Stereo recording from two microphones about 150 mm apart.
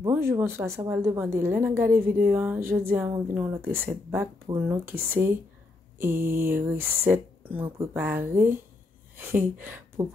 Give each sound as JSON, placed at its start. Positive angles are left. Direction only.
{"t": 0.0, "sound": "a woman's voice", "side_deg": -15}